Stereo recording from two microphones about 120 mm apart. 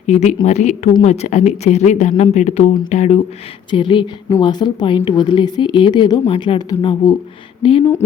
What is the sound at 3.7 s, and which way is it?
A woman's voice, 45° left (ahead or behind).